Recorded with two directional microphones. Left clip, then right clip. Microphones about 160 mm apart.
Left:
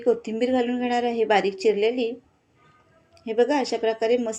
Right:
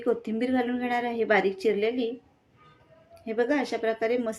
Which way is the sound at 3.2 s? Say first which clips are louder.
Left 5 dB; 20° left (ahead or behind).